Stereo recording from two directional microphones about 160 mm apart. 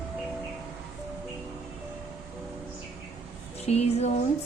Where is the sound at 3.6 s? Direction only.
40° left (ahead or behind).